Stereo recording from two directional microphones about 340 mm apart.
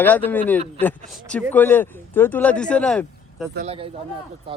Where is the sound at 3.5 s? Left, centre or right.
Centre.